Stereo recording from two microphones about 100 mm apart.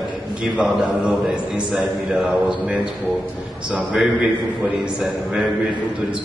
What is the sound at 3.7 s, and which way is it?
A man's voice, 5° right (ahead or behind).